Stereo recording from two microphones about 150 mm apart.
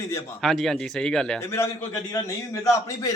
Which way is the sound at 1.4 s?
15° left (ahead or behind).